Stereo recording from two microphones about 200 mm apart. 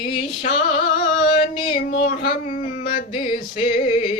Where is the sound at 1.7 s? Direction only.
40° left (ahead or behind).